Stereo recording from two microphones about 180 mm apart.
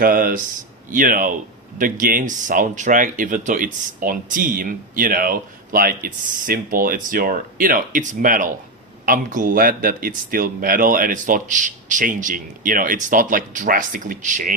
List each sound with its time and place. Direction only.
0.0 s speech: 50° right (ahead or behind)